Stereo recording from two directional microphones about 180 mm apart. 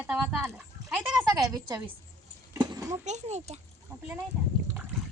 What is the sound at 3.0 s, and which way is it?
Speech, 40° right (ahead or behind).